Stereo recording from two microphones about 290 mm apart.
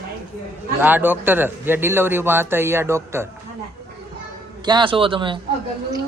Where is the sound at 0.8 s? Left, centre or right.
Centre.